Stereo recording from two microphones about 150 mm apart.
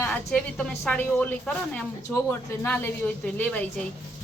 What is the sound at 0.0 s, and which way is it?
A woman's voice, 10° left (ahead or behind).